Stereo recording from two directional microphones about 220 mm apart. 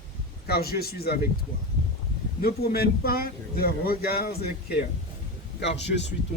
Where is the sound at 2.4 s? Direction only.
45° left (ahead or behind).